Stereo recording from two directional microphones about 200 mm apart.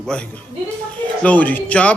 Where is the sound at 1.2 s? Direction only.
5° left (ahead or behind).